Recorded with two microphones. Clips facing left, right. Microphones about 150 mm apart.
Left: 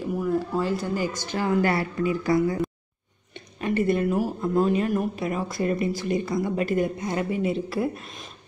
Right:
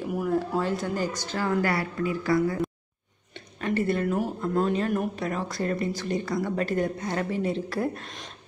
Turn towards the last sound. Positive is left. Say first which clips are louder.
# left 2 dB
turn(degrees=5)  # may be behind; listen again after turning